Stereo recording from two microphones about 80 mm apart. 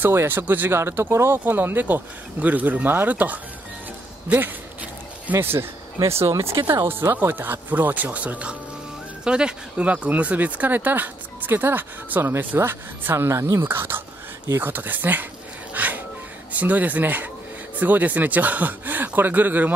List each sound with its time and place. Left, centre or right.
0.0 s speech: right
5.2 s speech: right
13.3 s speech: right
13.7 s a sound: right
14.5 s speech: right
15.7 s a sound: right
16.5 s speech: right